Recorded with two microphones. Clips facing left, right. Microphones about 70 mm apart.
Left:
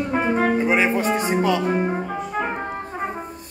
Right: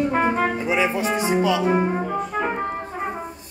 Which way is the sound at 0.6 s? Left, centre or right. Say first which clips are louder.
Left 2 dB; left.